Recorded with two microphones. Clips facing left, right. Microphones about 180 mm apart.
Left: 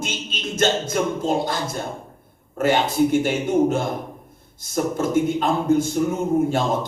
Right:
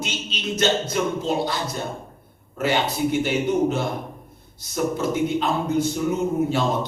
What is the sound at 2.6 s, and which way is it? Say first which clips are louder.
Speech: left 4 dB; 50° left (ahead or behind).